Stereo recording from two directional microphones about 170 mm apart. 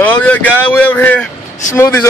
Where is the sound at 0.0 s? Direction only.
10° left (ahead or behind).